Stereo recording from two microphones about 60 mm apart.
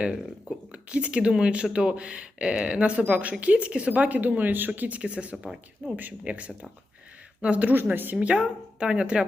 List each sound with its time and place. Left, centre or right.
0.7 s speech: centre